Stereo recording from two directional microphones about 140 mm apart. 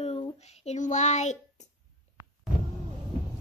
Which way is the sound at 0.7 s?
60° left (ahead or behind).